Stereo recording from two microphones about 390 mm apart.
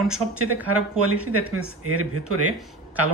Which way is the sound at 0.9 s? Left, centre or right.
Right.